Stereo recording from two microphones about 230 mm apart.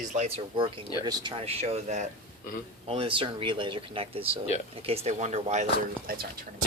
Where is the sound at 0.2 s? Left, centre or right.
Right.